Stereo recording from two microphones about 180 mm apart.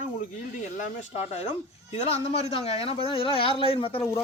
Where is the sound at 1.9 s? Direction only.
35° left (ahead or behind).